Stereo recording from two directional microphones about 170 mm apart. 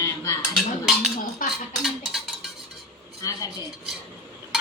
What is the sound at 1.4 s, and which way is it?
Dishes, 55° left (ahead or behind).